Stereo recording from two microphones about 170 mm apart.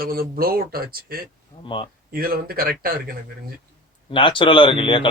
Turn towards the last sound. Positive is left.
turn(degrees=30)  # may be behind; listen again after turning